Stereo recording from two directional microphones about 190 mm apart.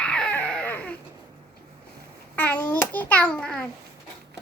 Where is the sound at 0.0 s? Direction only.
5° left (ahead or behind).